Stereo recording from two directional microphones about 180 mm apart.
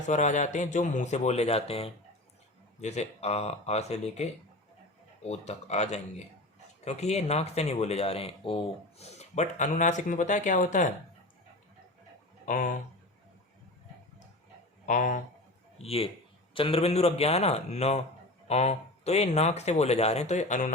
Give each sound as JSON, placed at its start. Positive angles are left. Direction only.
{"t": 0.1, "sound": "speech", "side_deg": 40}
{"t": 12.5, "sound": "speech", "side_deg": 45}
{"t": 14.8, "sound": "speech", "side_deg": 45}
{"t": 15.8, "sound": "speech", "side_deg": 35}